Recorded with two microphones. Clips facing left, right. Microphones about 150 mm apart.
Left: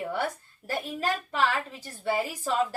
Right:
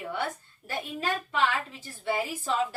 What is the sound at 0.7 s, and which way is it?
A woman's voice, 40° left (ahead or behind).